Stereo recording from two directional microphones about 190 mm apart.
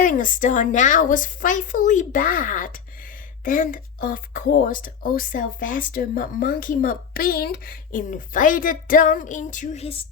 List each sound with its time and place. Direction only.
0.0 s speech: 45° left (ahead or behind)